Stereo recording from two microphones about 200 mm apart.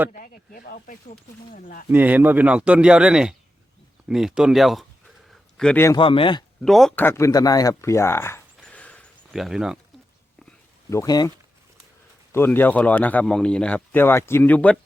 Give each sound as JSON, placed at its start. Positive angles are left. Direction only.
{"t": 0.1, "sound": "speech", "side_deg": 45}
{"t": 1.9, "sound": "speech", "side_deg": -10}
{"t": 6.0, "sound": "speech", "side_deg": 25}
{"t": 6.6, "sound": "speech", "side_deg": 0}
{"t": 10.8, "sound": "speech", "side_deg": 15}
{"t": 12.3, "sound": "speech", "side_deg": 10}